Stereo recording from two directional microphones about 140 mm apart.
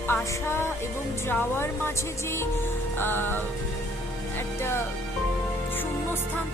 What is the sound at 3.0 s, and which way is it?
Speech, 15° left (ahead or behind).